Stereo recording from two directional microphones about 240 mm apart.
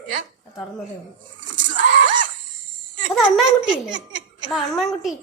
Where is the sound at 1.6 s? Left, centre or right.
Right.